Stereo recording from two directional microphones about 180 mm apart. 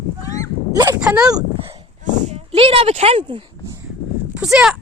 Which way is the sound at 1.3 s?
30° right (ahead or behind).